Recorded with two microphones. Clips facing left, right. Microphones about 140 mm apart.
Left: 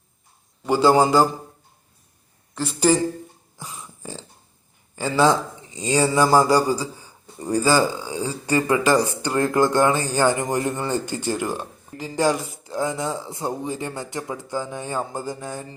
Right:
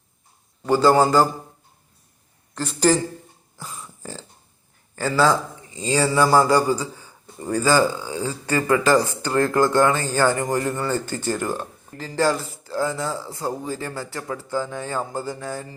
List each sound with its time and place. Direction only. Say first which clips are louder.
0.6 s speech: even; 10° left (ahead or behind)
2.6 s speech: even; 10° left (ahead or behind)
3.6 s burping: right 1 dB; 15° left (ahead or behind)
4.9 s speech: left 1 dB; 15° left (ahead or behind)